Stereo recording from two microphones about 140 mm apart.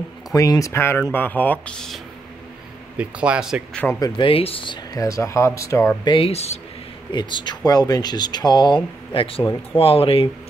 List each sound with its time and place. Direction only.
0.3 s speech: 25° left (ahead or behind); by 2.0 s 5° left (ahead or behind)
3.0 s speech: 10° right (ahead or behind)
4.0 s speech: 40° left (ahead or behind)
4.9 s speech: 25° left (ahead or behind)
6.0 s speech: 40° left (ahead or behind)
7.1 s speech: 35° left (ahead or behind)